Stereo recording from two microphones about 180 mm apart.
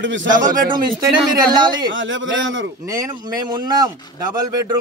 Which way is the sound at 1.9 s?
90° right.